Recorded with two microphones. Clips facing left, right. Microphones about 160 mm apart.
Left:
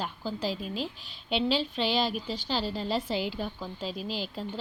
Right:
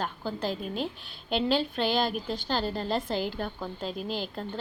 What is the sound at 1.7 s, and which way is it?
A woman's voice, 50° right (ahead or behind).